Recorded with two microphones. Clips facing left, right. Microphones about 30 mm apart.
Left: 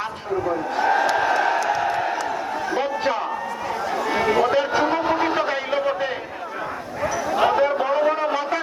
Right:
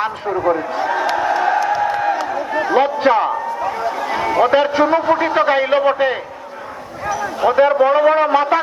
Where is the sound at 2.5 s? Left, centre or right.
Right.